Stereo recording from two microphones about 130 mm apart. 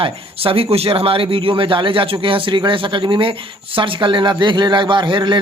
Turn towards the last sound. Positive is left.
turn(degrees=-35)  # may be behind; listen again after turning